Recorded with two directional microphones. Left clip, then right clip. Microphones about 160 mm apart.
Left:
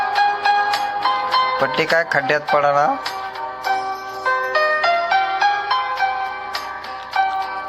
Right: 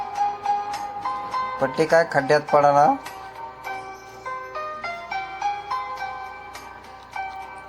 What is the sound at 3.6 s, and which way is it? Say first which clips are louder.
Music: left 14 dB; 35° left (ahead or behind).